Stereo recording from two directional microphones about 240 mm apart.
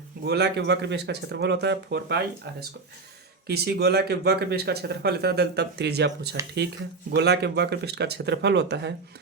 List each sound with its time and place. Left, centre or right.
0.3 s speech: right